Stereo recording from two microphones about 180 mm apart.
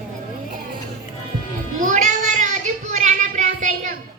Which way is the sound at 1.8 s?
45° right (ahead or behind).